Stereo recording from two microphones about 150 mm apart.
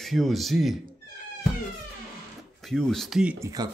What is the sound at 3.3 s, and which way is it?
Speech, 20° right (ahead or behind).